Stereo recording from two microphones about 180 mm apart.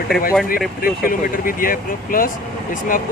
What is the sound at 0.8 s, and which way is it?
Speech, 50° left (ahead or behind).